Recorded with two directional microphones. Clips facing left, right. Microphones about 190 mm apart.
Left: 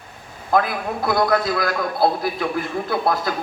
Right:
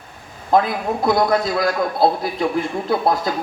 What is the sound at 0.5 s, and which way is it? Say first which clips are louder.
A man's voice: right 3 dB; 20° right (ahead or behind).